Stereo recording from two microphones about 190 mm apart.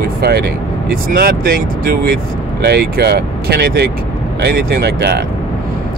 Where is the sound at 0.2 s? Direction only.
55° right (ahead or behind).